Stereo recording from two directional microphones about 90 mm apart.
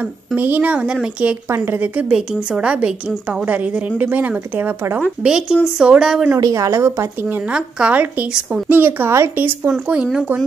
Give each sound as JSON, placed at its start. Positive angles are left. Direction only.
{"t": 0.4, "sound": "a woman's voice", "side_deg": -20}
{"t": 1.5, "sound": "a woman's voice", "side_deg": -30}
{"t": 1.8, "sound": "a woman's voice", "side_deg": -15}
{"t": 5.2, "sound": "a woman's voice", "side_deg": -10}
{"t": 6.4, "sound": "a woman's voice", "side_deg": -40}
{"t": 8.6, "sound": "a woman's voice", "side_deg": -20}
{"t": 9.7, "sound": "a woman's voice", "side_deg": -10}